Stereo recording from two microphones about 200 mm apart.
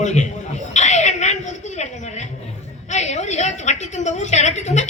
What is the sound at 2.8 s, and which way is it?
A woman's voice, 35° left (ahead or behind).